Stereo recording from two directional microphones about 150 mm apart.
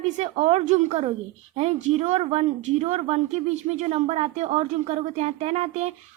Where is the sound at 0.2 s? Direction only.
45° right (ahead or behind).